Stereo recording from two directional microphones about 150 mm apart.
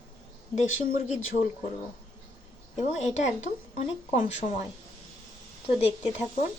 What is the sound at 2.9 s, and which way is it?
Speech, 50° left (ahead or behind).